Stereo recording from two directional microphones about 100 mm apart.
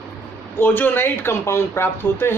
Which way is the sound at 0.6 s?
20° left (ahead or behind).